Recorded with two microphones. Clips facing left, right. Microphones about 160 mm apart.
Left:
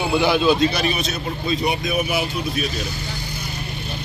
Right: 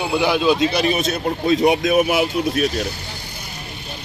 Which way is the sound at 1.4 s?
90° right.